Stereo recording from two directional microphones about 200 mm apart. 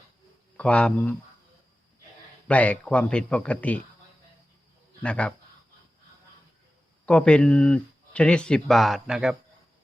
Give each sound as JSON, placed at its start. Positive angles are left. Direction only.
{"t": 0.5, "sound": "speech", "side_deg": 5}
{"t": 2.5, "sound": "speech", "side_deg": 5}
{"t": 5.0, "sound": "speech", "side_deg": 5}
{"t": 7.0, "sound": "speech", "side_deg": 5}